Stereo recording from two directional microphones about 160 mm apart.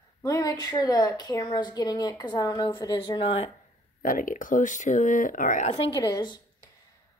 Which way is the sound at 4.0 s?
60° left (ahead or behind).